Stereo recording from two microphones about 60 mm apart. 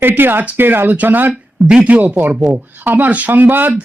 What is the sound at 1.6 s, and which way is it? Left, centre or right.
A man's voice, right.